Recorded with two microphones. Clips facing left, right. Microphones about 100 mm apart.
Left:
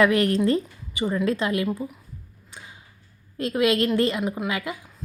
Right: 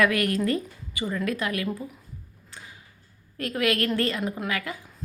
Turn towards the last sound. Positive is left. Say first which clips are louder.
# left 2 dB
turn(degrees=20)  # may be behind; listen again after turning